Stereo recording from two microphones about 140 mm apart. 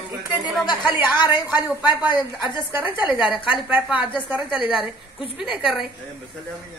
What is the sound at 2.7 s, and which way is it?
A woman's voice, 10° right (ahead or behind).